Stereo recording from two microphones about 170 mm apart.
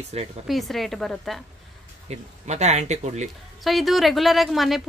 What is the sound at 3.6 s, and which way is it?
Speech, centre (ahead or behind).